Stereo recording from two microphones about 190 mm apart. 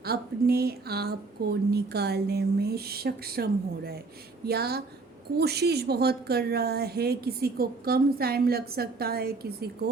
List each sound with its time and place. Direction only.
0.0 s a woman's voice: 55° right (ahead or behind)